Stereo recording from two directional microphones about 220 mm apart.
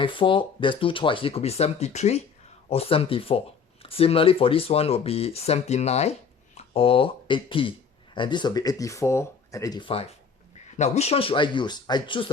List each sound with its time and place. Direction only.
0.0 s speech: 25° left (ahead or behind)